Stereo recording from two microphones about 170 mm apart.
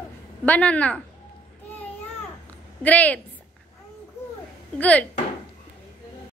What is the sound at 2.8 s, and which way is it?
Speech, 10° left (ahead or behind).